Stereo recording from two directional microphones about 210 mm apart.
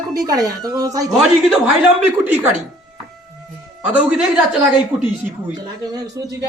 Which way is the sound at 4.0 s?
5° right (ahead or behind).